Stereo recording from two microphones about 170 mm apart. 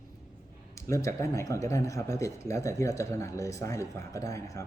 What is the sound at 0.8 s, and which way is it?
Speech, 20° left (ahead or behind).